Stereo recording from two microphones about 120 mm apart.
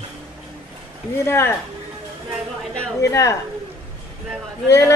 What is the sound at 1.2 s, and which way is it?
Speech, 20° left (ahead or behind).